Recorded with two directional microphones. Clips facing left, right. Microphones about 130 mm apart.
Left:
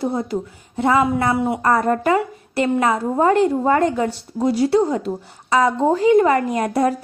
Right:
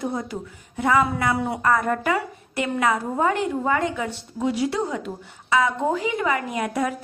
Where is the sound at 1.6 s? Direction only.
35° left (ahead or behind).